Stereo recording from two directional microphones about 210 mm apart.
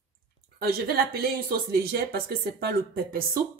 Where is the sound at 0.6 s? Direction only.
45° right (ahead or behind).